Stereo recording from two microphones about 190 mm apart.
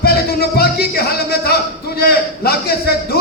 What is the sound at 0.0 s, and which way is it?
Music, 55° left (ahead or behind).